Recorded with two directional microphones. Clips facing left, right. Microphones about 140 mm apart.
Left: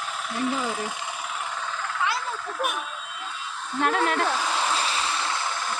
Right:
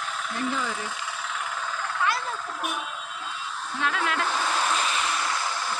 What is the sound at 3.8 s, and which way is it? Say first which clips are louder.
Speech: left 4 dB; 45° left (ahead or behind).